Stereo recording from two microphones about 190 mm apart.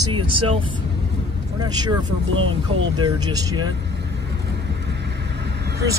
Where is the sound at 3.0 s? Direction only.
20° right (ahead or behind).